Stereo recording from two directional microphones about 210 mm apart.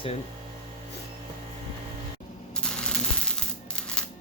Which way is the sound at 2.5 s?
5° left (ahead or behind).